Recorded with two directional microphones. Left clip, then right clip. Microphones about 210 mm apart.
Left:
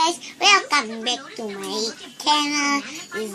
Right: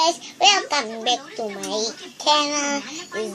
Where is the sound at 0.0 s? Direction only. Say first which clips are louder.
Right 2 dB; centre (ahead or behind).